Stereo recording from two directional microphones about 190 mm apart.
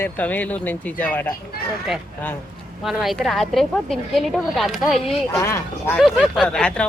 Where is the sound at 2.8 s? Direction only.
Centre (ahead or behind).